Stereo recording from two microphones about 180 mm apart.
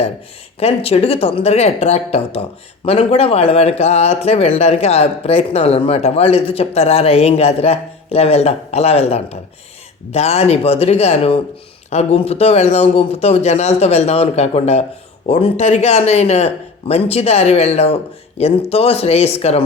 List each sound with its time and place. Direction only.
0.6 s speech: 35° left (ahead or behind)